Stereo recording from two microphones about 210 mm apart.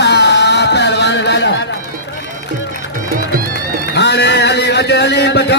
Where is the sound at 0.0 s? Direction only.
55° left (ahead or behind).